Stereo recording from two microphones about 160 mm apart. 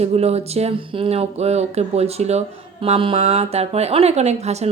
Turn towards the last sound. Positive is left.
turn(degrees=-45)  # may be behind; listen again after turning